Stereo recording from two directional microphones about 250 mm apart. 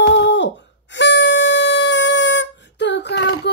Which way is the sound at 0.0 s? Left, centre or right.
Left.